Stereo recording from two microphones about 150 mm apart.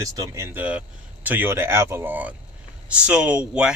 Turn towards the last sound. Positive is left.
turn(degrees=-5)  # may be behind; listen again after turning